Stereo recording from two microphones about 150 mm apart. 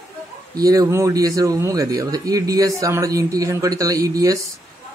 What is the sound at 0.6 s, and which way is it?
Speech, 25° right (ahead or behind).